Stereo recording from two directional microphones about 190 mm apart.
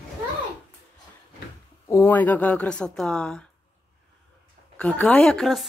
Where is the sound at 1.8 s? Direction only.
15° left (ahead or behind).